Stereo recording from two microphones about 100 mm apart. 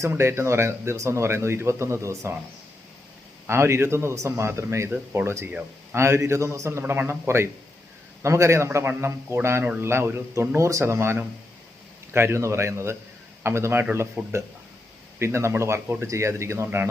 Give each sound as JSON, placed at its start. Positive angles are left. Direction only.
{"t": 0.0, "sound": "speech", "side_deg": -25}
{"t": 3.4, "sound": "speech", "side_deg": -25}